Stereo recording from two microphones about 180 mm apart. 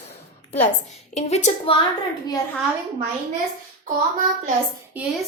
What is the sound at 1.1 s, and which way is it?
Speech, 35° left (ahead or behind).